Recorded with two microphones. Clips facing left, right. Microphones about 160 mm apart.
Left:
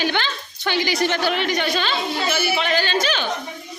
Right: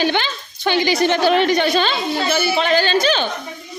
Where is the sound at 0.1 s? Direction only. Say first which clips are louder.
Right 3 dB; 20° right (ahead or behind).